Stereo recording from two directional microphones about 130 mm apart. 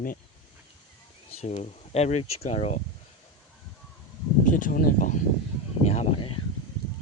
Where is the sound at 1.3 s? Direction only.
55° left (ahead or behind).